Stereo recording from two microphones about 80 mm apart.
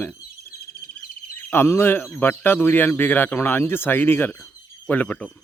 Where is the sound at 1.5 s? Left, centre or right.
Left.